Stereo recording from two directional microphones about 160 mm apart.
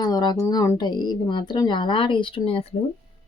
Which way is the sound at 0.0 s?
25° left (ahead or behind).